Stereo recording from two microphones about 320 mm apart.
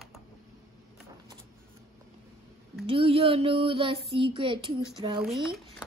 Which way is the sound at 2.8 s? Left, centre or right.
Centre.